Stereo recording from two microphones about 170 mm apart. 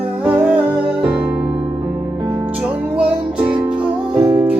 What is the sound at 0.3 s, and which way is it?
Music, 5° right (ahead or behind).